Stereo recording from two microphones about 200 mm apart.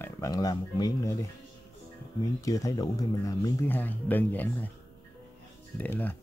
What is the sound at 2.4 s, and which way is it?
Speech, 15° left (ahead or behind).